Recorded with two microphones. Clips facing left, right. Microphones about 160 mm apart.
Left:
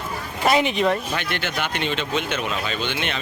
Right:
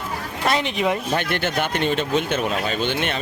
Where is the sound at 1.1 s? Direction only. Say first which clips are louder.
Right 4 dB; 50° right (ahead or behind).